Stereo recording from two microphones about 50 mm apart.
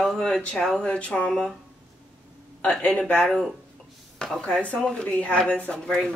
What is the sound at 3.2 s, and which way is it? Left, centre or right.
Speech, centre.